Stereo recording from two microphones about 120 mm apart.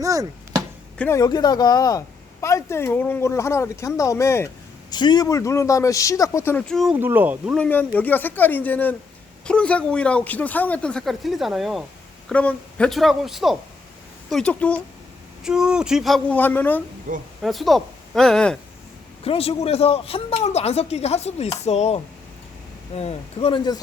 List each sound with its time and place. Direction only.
0.0 s speech: 30° right (ahead or behind)
1.1 s speech: 35° left (ahead or behind)
4.9 s speech: 35° left (ahead or behind); by 6.7 s 20° left (ahead or behind)
6.7 s speech: centre (ahead or behind)
6.9 s speech: 15° right (ahead or behind)
7.5 s speech: 15° left (ahead or behind); by 11.9 s centre (ahead or behind)
12.3 s speech: 10° left (ahead or behind)
15.4 s speech: 5° right (ahead or behind)
16.3 s speech: 15° left (ahead or behind)
17.1 s speech: 90° right
17.4 s speech: centre (ahead or behind)
19.2 s speech: 55° left (ahead or behind)